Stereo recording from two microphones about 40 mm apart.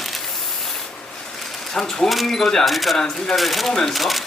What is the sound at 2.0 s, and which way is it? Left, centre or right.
Speech, centre.